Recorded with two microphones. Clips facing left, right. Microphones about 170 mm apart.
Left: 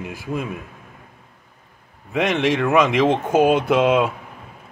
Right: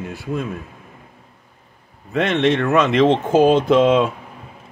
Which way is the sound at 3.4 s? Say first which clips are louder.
Right 3 dB; 65° left (ahead or behind).